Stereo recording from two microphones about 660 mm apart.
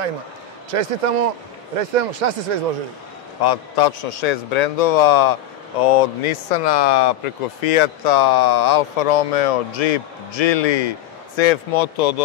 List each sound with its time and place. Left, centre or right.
0.7 s speech: right
3.4 s a man's voice: left